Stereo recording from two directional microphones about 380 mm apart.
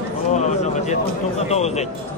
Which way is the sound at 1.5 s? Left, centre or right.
Centre.